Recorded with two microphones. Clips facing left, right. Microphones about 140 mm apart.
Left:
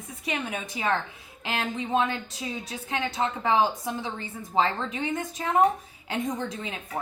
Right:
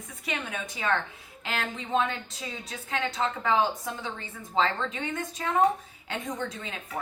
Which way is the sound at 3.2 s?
30° left (ahead or behind).